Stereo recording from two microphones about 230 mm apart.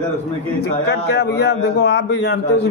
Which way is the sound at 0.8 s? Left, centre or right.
Left.